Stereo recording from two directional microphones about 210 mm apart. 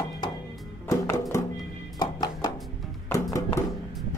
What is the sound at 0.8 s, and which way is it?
Music, 15° left (ahead or behind).